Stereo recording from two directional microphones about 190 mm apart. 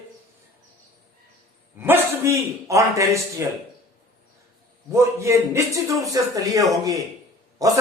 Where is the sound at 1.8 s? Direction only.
10° right (ahead or behind).